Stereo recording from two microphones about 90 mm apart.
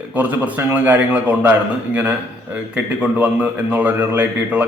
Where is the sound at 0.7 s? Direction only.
20° right (ahead or behind).